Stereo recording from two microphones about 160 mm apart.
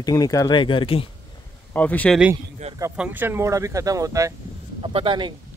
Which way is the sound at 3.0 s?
10° right (ahead or behind).